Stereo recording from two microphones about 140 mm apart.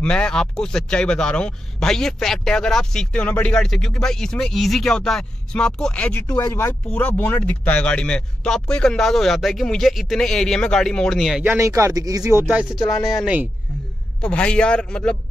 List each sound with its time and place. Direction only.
0.0 s speech: 5° left (ahead or behind)
11.4 s speech: 20° right (ahead or behind)
14.2 s a man's voice: 10° left (ahead or behind)